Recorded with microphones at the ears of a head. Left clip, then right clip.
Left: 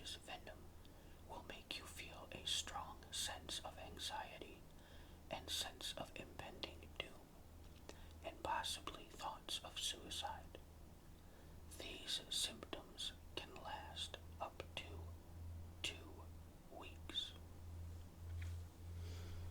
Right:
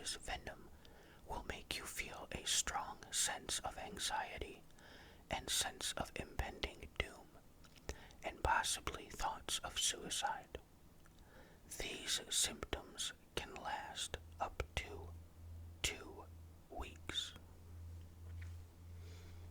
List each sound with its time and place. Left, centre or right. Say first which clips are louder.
0.0 s speech: right 6 dB; right
11.7 s speech: right 5 dB; right
13.3 s whispering: right 6 dB; right